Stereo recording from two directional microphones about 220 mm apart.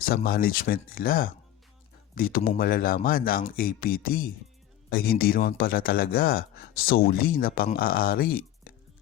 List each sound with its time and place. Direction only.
0.0 s speech: 40° left (ahead or behind)